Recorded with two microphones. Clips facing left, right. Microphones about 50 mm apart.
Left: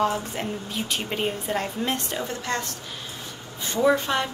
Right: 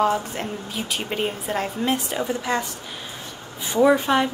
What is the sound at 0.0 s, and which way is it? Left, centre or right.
A woman's voice, centre.